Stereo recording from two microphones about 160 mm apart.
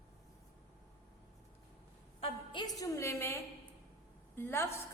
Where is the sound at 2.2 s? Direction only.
30° left (ahead or behind).